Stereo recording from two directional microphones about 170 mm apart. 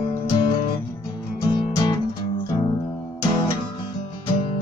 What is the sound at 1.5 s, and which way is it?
Music, 25° left (ahead or behind).